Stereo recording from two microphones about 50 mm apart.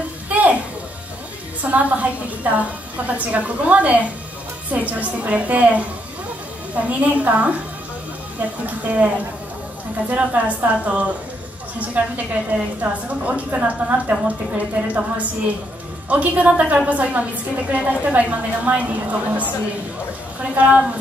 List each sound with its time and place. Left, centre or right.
0.3 s a sound: right
1.6 s a woman's voice: right
6.9 s a woman's voice: right
20.5 s a woman's voice: right